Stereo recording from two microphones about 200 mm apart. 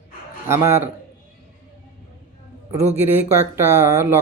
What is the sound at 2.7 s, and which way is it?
Speech, 10° right (ahead or behind).